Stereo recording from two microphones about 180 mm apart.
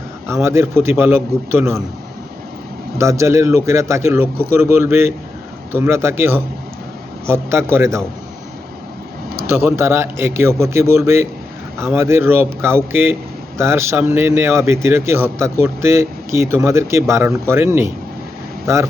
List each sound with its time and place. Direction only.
0.4 s speech: 15° right (ahead or behind)
3.0 s speech: 15° right (ahead or behind)
9.3 s speech: 15° right (ahead or behind)